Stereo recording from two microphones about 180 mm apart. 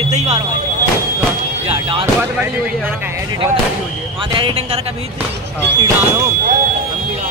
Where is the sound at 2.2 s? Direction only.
10° right (ahead or behind).